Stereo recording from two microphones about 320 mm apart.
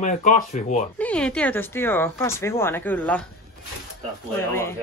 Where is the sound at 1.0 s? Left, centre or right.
Centre.